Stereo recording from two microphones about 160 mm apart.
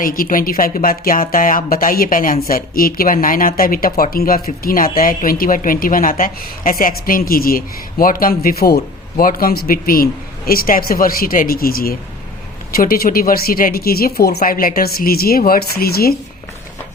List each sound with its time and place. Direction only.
0.0 s speech: 60° left (ahead or behind)